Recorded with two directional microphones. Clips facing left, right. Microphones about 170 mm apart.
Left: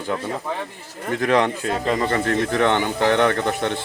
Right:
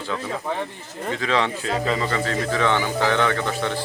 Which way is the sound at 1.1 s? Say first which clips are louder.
Left 5 dB; 50° left (ahead or behind).